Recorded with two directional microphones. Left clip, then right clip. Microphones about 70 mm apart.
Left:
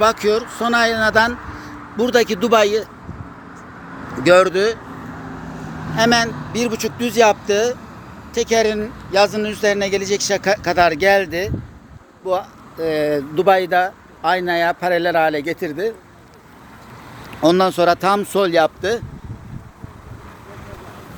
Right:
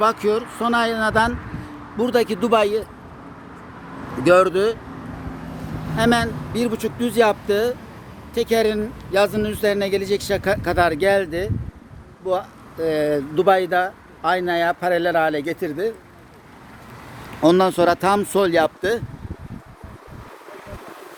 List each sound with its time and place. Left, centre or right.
0.0 s speech: centre
3.8 s vehicle: centre
4.1 s speech: centre
4.9 s vehicle: centre
6.0 s speech: centre
11.3 s speech: centre
15.6 s speech: centre
17.4 s speech: right